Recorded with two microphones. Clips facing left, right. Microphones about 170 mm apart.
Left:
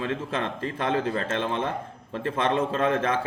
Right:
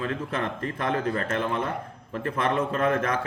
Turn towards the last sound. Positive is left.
turn(degrees=25)  # may be behind; listen again after turning